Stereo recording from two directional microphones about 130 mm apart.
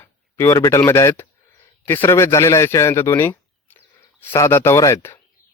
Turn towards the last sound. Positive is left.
turn(degrees=20)  # may be behind; listen again after turning